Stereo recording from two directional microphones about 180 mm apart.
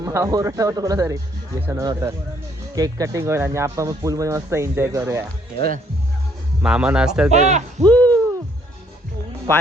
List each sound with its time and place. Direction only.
0.0 s speech: 15° right (ahead or behind)
6.6 s a man's voice: 5° right (ahead or behind)
7.3 s speech: 40° right (ahead or behind)
7.9 s hoot: 10° left (ahead or behind)